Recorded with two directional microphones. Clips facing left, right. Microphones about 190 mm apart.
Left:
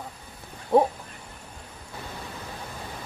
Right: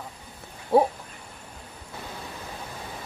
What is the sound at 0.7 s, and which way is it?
Duck, 5° right (ahead or behind).